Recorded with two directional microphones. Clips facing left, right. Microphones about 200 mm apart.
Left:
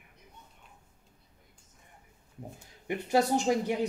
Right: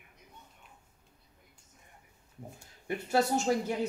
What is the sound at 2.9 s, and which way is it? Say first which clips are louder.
Speech: left 2 dB; 15° left (ahead or behind).